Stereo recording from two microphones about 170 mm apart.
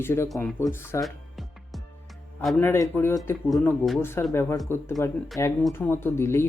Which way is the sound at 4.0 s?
15° left (ahead or behind).